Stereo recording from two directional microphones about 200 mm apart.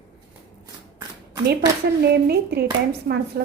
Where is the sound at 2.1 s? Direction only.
55° right (ahead or behind).